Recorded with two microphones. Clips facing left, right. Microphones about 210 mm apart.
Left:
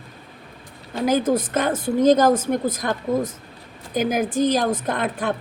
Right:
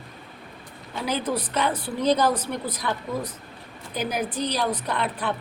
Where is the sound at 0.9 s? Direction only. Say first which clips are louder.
Left 7 dB; 45° left (ahead or behind).